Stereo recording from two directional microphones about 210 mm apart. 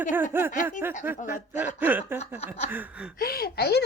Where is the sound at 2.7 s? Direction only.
10° right (ahead or behind).